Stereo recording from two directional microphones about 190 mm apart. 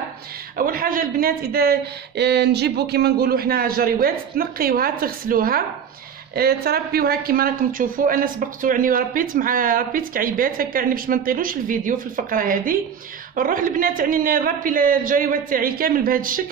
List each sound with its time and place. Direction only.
0.6 s speech: 50° right (ahead or behind)